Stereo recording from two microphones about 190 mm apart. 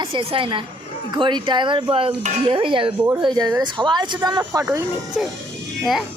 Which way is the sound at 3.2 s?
25° right (ahead or behind).